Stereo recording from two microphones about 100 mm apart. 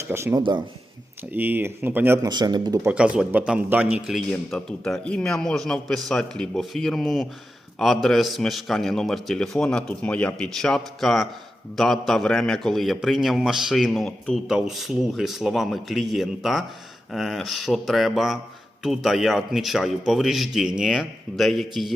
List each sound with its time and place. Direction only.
0.1 s speech: 25° right (ahead or behind)
0.3 s speech: 50° right (ahead or behind)
1.3 s speech: 20° right (ahead or behind)
2.1 s speech: 40° right (ahead or behind)
2.8 s a man's voice: 10° right (ahead or behind)
4.3 s a man's voice: 5° left (ahead or behind)